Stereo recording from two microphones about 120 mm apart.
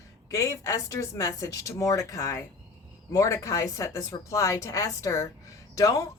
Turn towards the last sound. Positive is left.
turn(degrees=30)  # may be behind; listen again after turning